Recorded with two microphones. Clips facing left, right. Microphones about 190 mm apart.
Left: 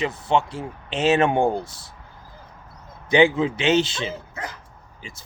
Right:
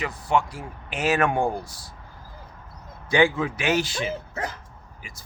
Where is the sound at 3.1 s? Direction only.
20° left (ahead or behind).